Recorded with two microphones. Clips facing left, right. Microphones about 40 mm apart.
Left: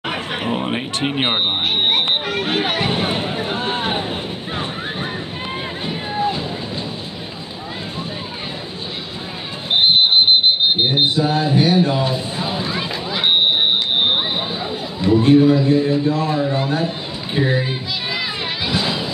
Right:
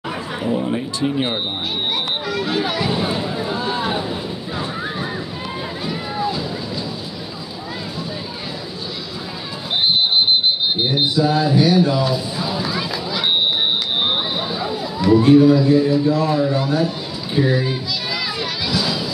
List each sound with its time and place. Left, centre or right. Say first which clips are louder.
0.0 s speech: left 1 dB; left
4.6 s slosh: right 1 dB; left
9.7 s a sound: left 3 dB; left
16.4 s children playing: right 1 dB; left